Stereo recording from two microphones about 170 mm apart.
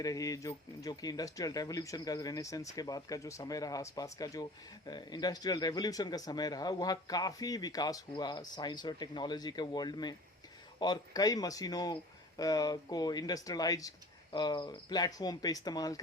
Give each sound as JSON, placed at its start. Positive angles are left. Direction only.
{"t": 0.0, "sound": "speech", "side_deg": 20}